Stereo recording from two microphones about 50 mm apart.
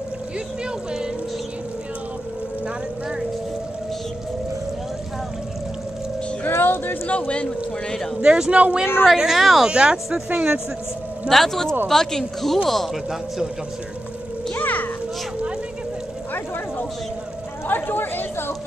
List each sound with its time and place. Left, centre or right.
6.4 s music: left
7.1 s a man's voice: left
8.2 s speech: right
9.0 s speech: centre
9.7 s speech: centre
11.2 s speech: centre
14.5 s music: left
17.6 s speech: left